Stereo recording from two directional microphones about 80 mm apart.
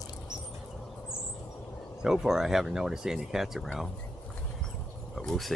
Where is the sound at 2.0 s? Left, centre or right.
Centre.